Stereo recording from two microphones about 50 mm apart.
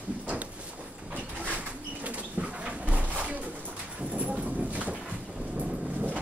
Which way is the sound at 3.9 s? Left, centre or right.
Right.